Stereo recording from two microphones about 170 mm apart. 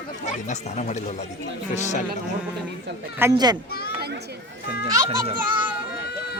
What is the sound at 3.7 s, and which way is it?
Speech, 65° left (ahead or behind).